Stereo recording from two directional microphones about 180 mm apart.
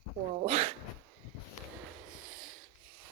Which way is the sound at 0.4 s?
35° right (ahead or behind).